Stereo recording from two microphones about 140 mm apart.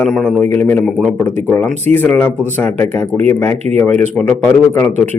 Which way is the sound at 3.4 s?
15° left (ahead or behind).